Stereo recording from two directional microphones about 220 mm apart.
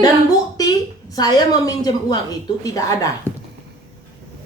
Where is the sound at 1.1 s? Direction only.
15° left (ahead or behind).